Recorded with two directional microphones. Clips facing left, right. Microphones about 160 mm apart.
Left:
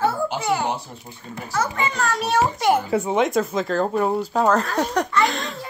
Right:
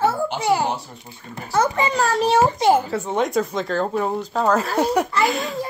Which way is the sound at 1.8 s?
30° right (ahead or behind).